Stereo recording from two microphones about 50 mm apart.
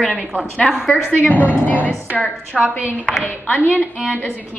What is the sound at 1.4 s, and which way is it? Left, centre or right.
Speech, right.